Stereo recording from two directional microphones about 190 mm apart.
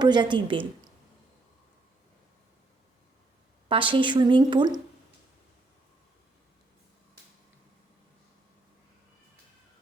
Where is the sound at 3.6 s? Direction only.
25° right (ahead or behind).